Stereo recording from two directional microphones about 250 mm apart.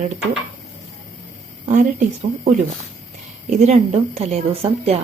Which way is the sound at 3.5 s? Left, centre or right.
Right.